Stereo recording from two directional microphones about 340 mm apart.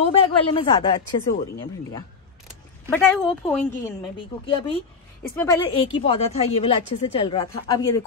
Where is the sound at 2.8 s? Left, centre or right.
Centre.